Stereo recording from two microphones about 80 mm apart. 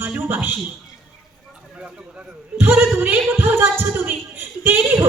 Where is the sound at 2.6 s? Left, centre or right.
Right.